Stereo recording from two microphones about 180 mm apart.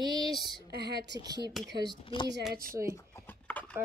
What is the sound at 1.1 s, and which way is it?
Speech, 20° right (ahead or behind).